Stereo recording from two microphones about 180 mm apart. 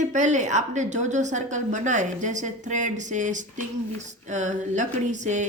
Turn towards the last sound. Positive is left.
turn(degrees=-40)  # may be behind; listen again after turning